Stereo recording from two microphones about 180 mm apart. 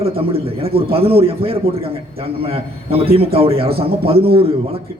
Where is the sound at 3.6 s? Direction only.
60° right (ahead or behind).